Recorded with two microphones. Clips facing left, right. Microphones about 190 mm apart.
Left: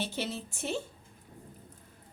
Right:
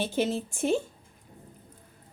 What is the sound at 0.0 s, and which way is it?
Speech, 50° right (ahead or behind).